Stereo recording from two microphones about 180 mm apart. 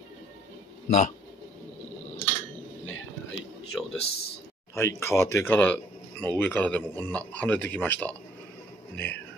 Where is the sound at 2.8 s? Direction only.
90° left.